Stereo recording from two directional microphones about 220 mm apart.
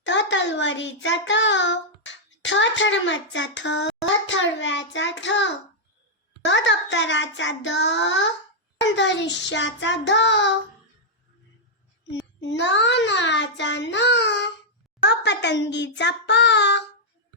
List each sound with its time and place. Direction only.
0.0 s a child's voice: 55° left (ahead or behind)
6.4 s child singing: 55° left (ahead or behind)
12.4 s child singing: 55° left (ahead or behind)